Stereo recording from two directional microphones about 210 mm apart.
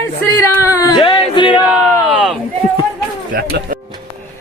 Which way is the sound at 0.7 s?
15° left (ahead or behind).